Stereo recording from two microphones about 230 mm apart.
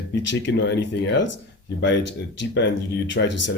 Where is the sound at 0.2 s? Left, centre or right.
Left.